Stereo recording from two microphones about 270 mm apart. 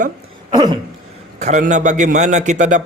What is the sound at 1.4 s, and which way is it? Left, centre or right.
Speech, right.